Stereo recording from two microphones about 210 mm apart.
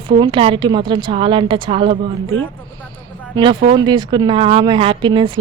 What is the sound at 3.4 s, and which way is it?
A woman's voice, 25° right (ahead or behind).